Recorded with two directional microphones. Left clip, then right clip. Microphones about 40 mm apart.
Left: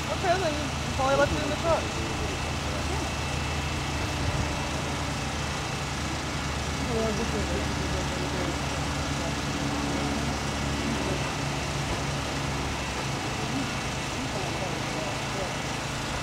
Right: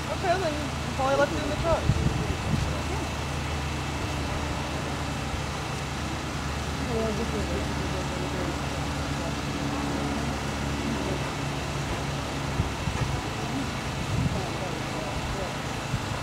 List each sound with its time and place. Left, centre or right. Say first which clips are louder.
1.0 s speech: even; left